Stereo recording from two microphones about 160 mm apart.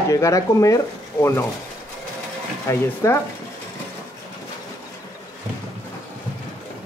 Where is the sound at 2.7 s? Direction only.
15° left (ahead or behind).